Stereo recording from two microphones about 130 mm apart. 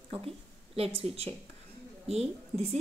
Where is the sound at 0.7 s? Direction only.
50° right (ahead or behind).